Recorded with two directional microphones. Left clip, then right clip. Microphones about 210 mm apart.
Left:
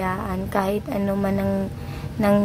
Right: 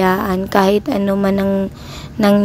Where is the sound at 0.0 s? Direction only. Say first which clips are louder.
Right 10 dB; 40° right (ahead or behind).